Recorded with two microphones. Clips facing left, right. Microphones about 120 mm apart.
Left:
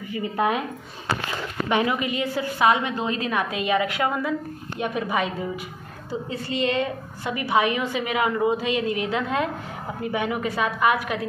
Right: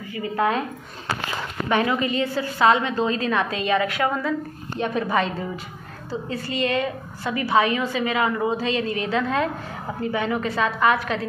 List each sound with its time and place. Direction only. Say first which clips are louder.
0.1 s speech: right 1 dB; 20° left (ahead or behind)
1.7 s a woman's voice: right 2 dB; 15° left (ahead or behind)
6.3 s a woman's voice: even; 20° left (ahead or behind)